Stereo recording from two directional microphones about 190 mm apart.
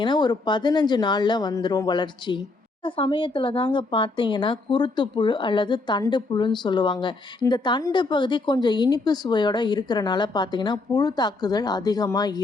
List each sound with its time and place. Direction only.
0.0 s speech: 25° left (ahead or behind)